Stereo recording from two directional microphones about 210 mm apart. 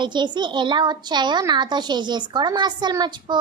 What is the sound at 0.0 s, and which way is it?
A child's voice, 20° right (ahead or behind).